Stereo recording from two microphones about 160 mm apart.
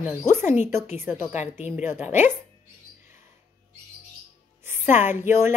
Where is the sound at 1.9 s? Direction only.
50° left (ahead or behind).